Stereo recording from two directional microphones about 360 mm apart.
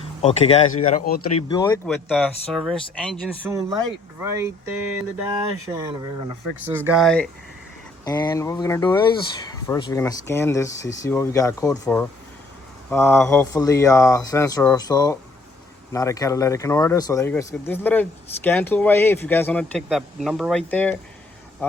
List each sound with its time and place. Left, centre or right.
0.2 s speech: centre
1.5 s speech: centre
1.9 s a man's voice: centre
6.7 s a man's voice: centre